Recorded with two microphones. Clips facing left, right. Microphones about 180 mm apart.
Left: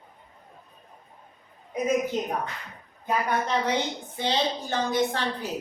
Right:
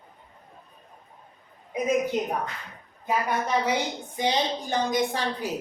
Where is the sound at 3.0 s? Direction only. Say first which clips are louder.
Even; 10° right (ahead or behind).